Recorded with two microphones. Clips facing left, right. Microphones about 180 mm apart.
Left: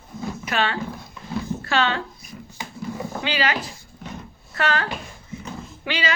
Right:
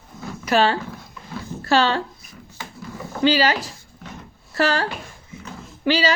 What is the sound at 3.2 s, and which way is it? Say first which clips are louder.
Speech: right 8 dB; 35° right (ahead or behind).